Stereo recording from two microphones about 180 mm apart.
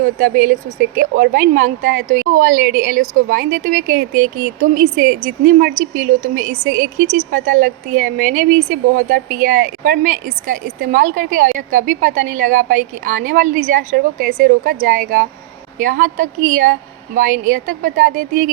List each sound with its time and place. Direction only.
0.0 s speech: 50° right (ahead or behind)